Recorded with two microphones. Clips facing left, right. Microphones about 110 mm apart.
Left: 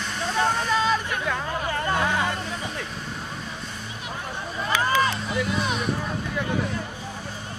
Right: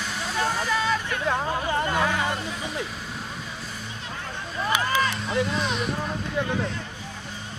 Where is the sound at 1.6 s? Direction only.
20° right (ahead or behind).